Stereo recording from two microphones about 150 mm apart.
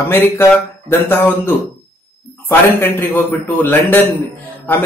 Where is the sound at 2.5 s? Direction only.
15° left (ahead or behind).